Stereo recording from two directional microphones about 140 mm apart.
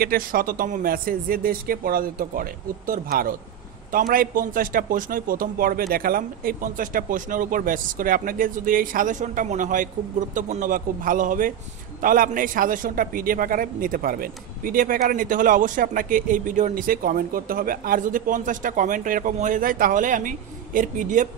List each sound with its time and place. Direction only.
0.0 s a man's voice: 90° right; by 21.3 s 70° right (ahead or behind)